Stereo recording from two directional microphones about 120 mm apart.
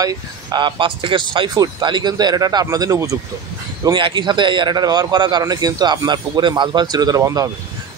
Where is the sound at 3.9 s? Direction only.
40° right (ahead or behind).